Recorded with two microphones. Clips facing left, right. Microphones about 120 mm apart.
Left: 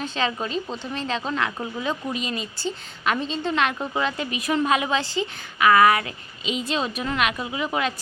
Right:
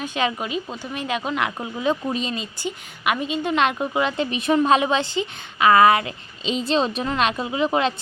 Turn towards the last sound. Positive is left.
turn(degrees=-25)  # may be behind; listen again after turning